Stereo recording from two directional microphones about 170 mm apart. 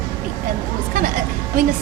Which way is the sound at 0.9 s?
55° right (ahead or behind).